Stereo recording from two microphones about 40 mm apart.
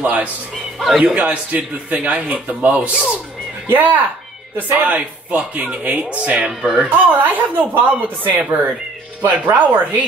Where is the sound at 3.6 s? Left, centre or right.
Right.